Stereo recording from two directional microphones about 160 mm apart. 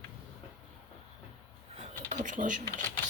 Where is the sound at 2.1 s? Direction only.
55° right (ahead or behind).